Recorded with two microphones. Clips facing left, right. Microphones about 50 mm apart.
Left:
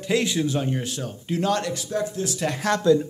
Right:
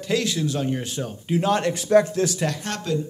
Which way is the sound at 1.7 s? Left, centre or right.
Right.